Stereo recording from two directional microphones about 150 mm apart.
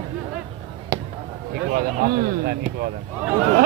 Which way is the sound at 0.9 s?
25° right (ahead or behind).